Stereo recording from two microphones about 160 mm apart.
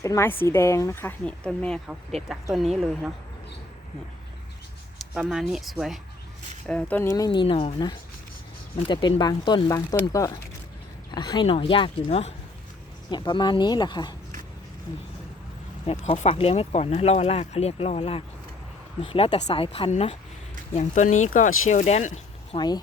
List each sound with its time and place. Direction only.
0.0 s speech: 15° left (ahead or behind); by 2.6 s centre (ahead or behind)
5.1 s speech: 5° right (ahead or behind); by 7.3 s 15° left (ahead or behind)
7.3 s speech: 30° left (ahead or behind)
13.1 s speech: 30° left (ahead or behind)
15.9 s speech: 40° left (ahead or behind)
22.5 s speech: 25° left (ahead or behind)